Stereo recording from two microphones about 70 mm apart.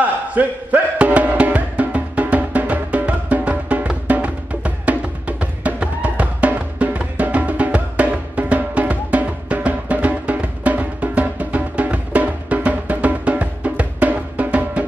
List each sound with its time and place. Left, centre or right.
0.3 s music: right